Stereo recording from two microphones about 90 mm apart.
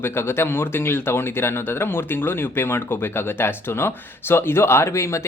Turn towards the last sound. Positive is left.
turn(degrees=35)  # may be behind; listen again after turning